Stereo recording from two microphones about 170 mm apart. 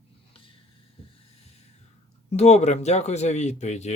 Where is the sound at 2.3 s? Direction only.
40° left (ahead or behind).